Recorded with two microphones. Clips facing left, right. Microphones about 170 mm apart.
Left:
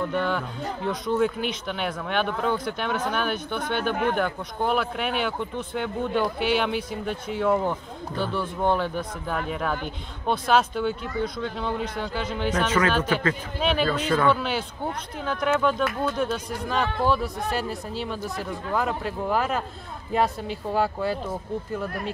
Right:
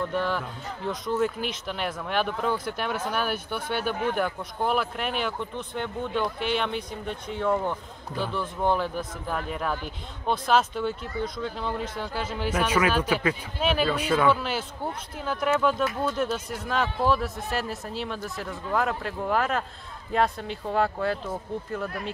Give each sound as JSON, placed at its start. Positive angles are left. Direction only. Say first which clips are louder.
{"t": 0.1, "sound": "speech", "louder": "left 2 dB", "side_deg": 0}
{"t": 3.9, "sound": "speech", "louder": "left 5 dB", "side_deg": 65}
{"t": 4.2, "sound": "speech", "louder": "left 1 dB", "side_deg": 0}